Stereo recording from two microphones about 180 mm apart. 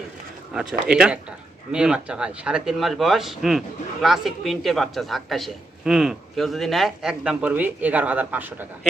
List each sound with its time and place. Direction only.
0.5 s a man's voice: 5° right (ahead or behind)